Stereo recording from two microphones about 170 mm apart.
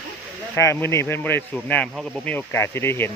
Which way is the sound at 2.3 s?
15° left (ahead or behind).